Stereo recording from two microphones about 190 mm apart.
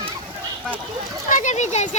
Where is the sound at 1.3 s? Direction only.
40° left (ahead or behind).